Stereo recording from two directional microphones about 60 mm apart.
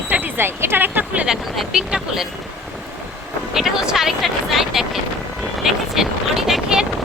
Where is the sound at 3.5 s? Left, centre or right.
Centre.